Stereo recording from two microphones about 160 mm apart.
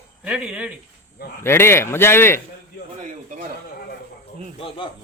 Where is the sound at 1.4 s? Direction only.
15° left (ahead or behind).